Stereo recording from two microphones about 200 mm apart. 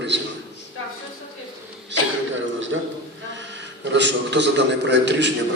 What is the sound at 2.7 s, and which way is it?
Speech, 75° right (ahead or behind).